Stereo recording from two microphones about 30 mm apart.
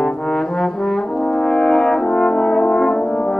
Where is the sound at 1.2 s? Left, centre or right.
Left.